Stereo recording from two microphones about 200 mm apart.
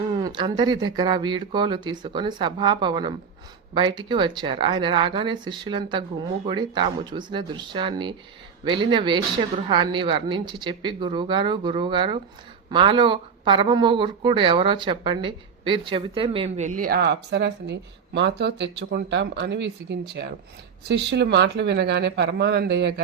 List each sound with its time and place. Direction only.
0.2 s speech: 20° right (ahead or behind); by 23.0 s 60° right (ahead or behind)